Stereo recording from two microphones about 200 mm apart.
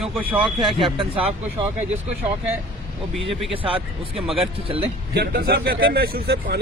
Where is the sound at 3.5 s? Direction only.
25° right (ahead or behind).